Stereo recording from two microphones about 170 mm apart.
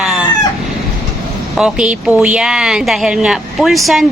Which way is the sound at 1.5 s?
5° right (ahead or behind).